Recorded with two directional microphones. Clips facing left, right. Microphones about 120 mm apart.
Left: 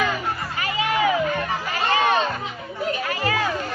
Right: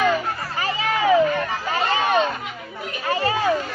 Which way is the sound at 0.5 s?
30° right (ahead or behind).